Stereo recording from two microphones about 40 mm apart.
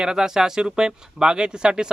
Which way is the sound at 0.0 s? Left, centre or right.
Centre.